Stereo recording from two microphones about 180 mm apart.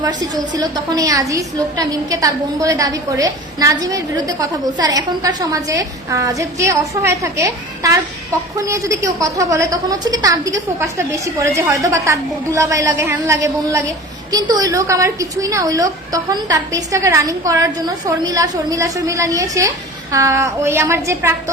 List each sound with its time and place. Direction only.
0.0 s a woman's voice: 20° right (ahead or behind)